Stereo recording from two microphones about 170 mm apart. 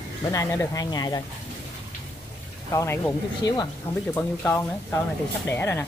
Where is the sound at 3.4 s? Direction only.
90° left.